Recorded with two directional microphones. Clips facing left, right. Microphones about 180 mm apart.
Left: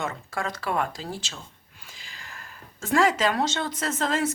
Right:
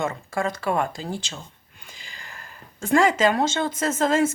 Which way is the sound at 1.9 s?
Centre (ahead or behind).